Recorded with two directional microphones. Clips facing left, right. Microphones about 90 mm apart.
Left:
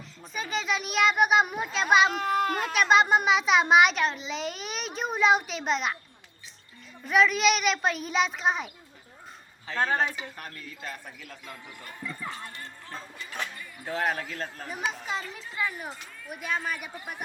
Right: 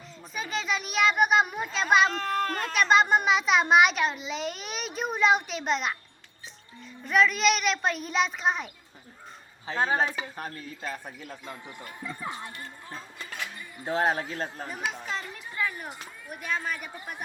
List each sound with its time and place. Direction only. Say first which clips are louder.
0.2 s a child's voice: left 1 dB; centre (ahead or behind)
7.0 s a child's voice: left 1 dB; centre (ahead or behind)
9.6 s speech: right 1 dB; 15° right (ahead or behind)
15.2 s speech: left 1 dB; 10° right (ahead or behind)
15.5 s a child's voice: even; 5° left (ahead or behind)